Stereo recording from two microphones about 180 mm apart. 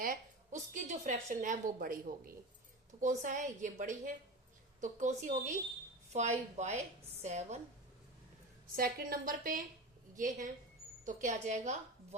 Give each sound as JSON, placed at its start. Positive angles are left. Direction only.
{"t": 0.0, "sound": "a woman's voice", "side_deg": -45}
{"t": 8.7, "sound": "a woman's voice", "side_deg": -50}